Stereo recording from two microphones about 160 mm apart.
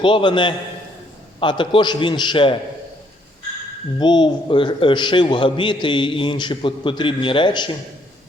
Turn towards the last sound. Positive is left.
turn(degrees=30)  # may be behind; listen again after turning